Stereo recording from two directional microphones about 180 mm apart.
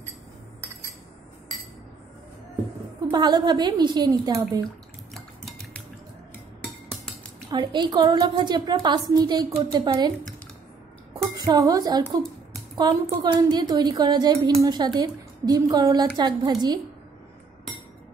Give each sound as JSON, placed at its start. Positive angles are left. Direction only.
{"t": 3.1, "sound": "a woman's voice", "side_deg": -25}
{"t": 5.1, "sound": "cutlery", "side_deg": 0}
{"t": 7.5, "sound": "a woman's voice", "side_deg": -25}
{"t": 11.3, "sound": "a woman's voice", "side_deg": -20}